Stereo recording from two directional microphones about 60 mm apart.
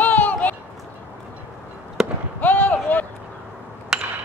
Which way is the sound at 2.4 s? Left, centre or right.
Left.